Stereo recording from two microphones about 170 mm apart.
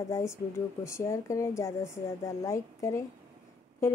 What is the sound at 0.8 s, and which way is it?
Speech, 15° left (ahead or behind).